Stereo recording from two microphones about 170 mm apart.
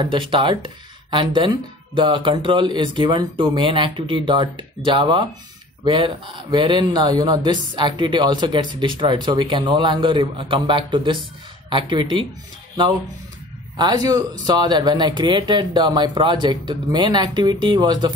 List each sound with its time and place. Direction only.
0.0 s a man's voice: 30° right (ahead or behind)
13.7 s a man's voice: 25° right (ahead or behind)